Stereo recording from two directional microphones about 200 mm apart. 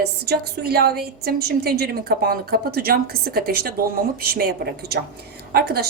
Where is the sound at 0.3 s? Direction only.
50° right (ahead or behind).